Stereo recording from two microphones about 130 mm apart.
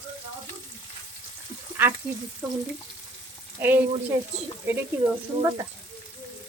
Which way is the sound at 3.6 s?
15° right (ahead or behind).